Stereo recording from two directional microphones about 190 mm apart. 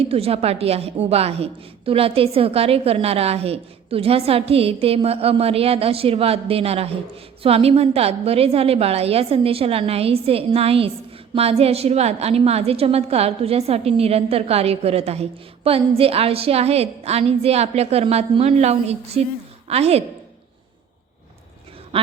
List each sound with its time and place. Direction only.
0.0 s a woman's voice: 30° right (ahead or behind)